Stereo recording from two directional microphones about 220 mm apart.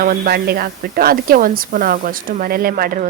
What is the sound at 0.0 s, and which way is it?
Speech, 40° right (ahead or behind).